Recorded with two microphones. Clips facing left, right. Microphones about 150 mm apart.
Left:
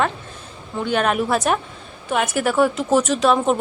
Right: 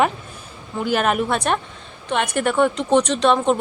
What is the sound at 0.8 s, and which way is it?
A woman's voice, 5° right (ahead or behind).